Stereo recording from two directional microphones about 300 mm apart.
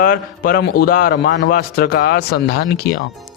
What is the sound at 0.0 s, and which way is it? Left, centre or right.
A man's voice, left.